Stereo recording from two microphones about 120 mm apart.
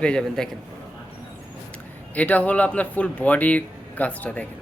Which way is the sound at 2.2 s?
10° left (ahead or behind).